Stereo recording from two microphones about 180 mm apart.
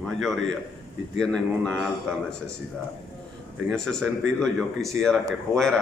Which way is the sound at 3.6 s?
Centre (ahead or behind).